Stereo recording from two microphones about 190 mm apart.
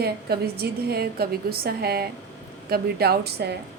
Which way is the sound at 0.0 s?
55° right (ahead or behind).